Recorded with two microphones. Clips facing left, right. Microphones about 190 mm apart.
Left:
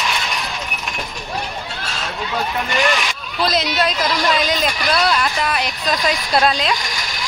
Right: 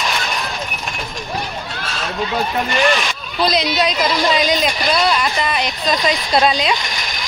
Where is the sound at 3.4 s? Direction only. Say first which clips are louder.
Right 2 dB; 5° left (ahead or behind).